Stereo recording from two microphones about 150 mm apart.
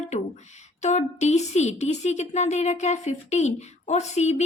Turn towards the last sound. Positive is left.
turn(degrees=50)  # may be behind; listen again after turning